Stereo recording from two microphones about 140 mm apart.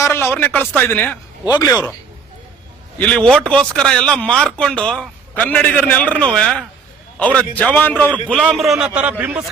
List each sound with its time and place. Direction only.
0.0 s speech: 15° left (ahead or behind)
1.5 s speech: 25° left (ahead or behind)
3.2 s speech: 5° left (ahead or behind)
8.4 s a man's voice: centre (ahead or behind)